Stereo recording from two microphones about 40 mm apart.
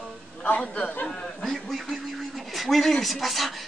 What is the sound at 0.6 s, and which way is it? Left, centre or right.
Speech, left.